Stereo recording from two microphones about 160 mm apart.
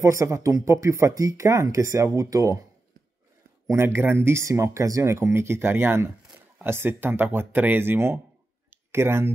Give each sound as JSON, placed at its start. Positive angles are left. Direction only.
{"t": 0.0, "sound": "speech", "side_deg": -20}
{"t": 3.6, "sound": "speech", "side_deg": -15}
{"t": 8.6, "sound": "clicking", "side_deg": -15}